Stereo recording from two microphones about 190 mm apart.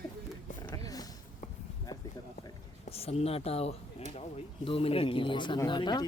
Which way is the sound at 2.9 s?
30° left (ahead or behind).